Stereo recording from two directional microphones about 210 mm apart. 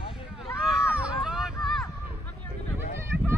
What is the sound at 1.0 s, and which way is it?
Vehicle, 5° right (ahead or behind).